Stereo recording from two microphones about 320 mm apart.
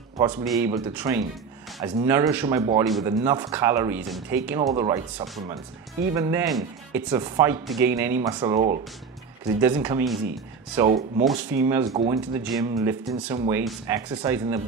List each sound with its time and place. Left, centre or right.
0.2 s speech: centre
9.6 s speech: centre